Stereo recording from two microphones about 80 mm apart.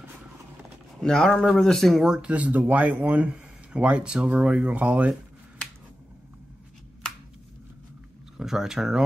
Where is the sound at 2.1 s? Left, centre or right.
Centre.